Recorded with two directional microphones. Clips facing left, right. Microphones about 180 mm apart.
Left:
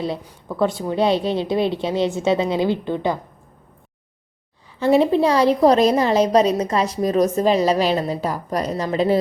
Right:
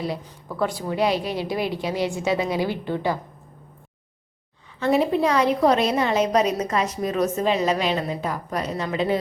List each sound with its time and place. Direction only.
0.4 s a woman's voice: 25° left (ahead or behind)
4.8 s a woman's voice: 30° left (ahead or behind)